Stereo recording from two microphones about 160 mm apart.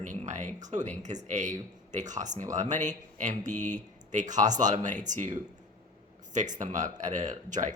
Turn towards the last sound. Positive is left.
turn(degrees=-50)  # may be behind; listen again after turning